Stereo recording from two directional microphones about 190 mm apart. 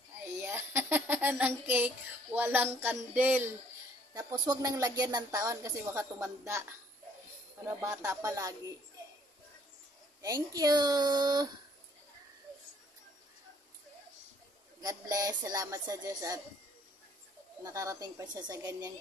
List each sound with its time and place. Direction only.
0.4 s a sound: 10° right (ahead or behind)
2.3 s speech: 10° right (ahead or behind)
7.6 s speech: 15° right (ahead or behind)
10.2 s speech: 20° right (ahead or behind)
14.8 s speech: 20° right (ahead or behind)
17.6 s speech: 15° right (ahead or behind)